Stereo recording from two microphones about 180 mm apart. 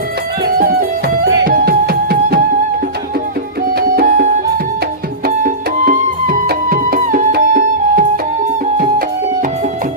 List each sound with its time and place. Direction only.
0.6 s music: 55° right (ahead or behind)
3.8 s music: 55° right (ahead or behind)